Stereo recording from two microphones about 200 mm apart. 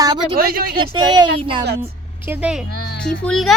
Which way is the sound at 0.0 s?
20° right (ahead or behind).